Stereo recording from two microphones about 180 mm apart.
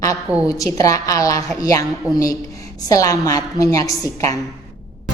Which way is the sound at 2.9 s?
20° left (ahead or behind).